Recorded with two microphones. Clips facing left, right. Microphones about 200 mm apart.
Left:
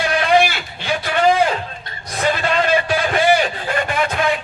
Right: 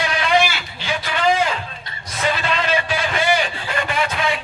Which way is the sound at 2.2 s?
50° left (ahead or behind).